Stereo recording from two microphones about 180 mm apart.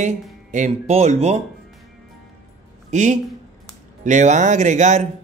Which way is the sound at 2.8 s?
40° right (ahead or behind).